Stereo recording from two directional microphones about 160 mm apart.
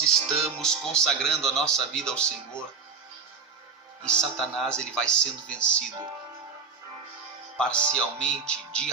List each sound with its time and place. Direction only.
0.0 s music: 5° left (ahead or behind)
0.6 s speech: 5° left (ahead or behind)
4.0 s speech: 5° left (ahead or behind)
7.5 s speech: 5° left (ahead or behind)